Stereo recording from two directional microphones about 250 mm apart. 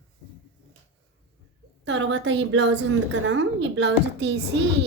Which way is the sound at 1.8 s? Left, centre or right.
Right.